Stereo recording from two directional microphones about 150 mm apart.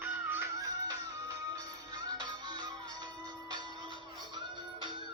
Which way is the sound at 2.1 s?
30° right (ahead or behind).